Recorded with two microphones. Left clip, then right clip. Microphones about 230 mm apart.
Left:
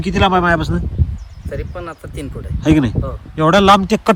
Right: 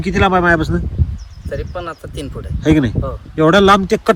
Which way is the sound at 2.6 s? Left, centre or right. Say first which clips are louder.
Even; centre.